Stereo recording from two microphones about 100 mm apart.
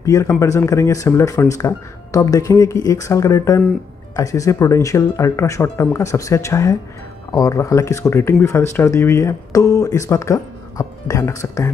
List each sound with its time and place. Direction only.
0.0 s speech: 30° left (ahead or behind)